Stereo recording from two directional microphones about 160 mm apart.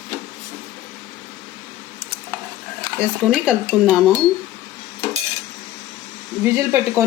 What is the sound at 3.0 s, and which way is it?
Speech, 5° right (ahead or behind).